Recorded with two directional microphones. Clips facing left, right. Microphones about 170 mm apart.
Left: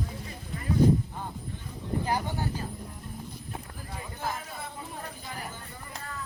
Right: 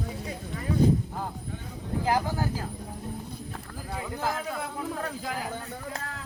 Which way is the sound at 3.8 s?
85° right.